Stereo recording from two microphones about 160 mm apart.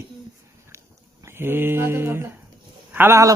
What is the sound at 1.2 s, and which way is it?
A man's voice, 15° right (ahead or behind).